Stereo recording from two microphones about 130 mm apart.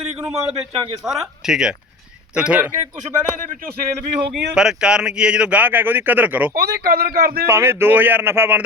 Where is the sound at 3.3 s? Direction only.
80° right.